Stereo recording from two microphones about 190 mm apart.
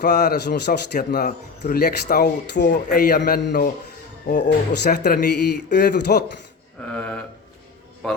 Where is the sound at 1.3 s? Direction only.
40° left (ahead or behind).